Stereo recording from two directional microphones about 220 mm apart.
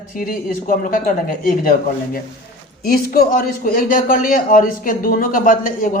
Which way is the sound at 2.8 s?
40° left (ahead or behind).